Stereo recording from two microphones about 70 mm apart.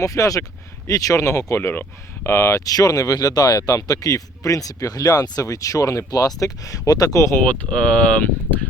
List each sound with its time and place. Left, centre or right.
0.0 s speech: left
5.5 s speech: left
7.4 s speech: centre